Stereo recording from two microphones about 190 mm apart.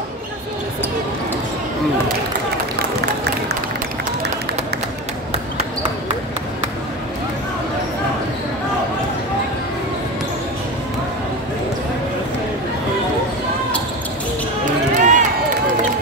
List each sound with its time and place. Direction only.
15.0 s run: 40° right (ahead or behind)